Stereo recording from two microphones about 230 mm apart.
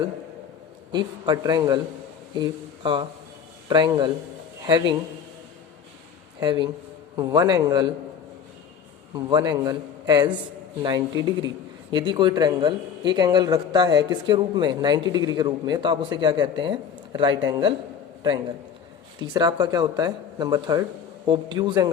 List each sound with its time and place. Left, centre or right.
0.9 s speech: centre
6.4 s speech: centre
9.1 s speech: centre
19.2 s speech: centre